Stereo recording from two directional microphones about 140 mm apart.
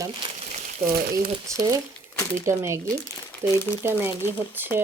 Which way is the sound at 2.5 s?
20° right (ahead or behind).